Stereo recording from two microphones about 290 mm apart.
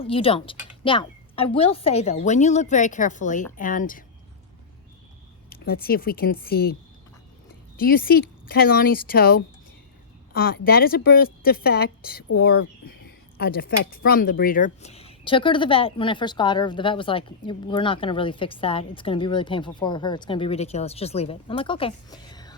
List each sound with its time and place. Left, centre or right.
0.0 s speech: centre
5.5 s speech: left
7.8 s speech: left; by 22.5 s centre